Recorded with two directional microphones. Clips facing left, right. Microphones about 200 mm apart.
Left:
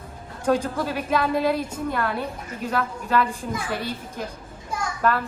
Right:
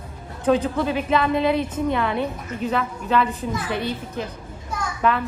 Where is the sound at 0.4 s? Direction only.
5° left (ahead or behind).